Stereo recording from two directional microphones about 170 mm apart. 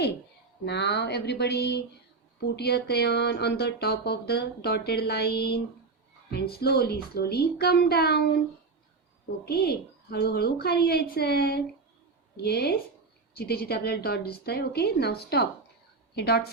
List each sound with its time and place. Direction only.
0.6 s speech: 90° left; by 8.3 s 70° left (ahead or behind)
9.5 s speech: 70° left (ahead or behind)